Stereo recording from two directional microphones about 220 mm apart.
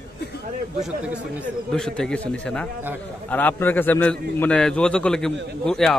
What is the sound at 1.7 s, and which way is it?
A man's voice, 5° left (ahead or behind).